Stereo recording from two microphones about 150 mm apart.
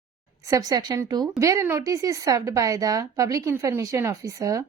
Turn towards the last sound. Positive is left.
turn(degrees=-20)  # may be behind; listen again after turning